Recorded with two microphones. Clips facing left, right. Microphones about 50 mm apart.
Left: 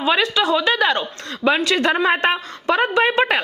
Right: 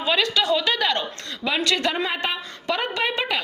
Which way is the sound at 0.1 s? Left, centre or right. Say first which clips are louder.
Left 3 dB; left.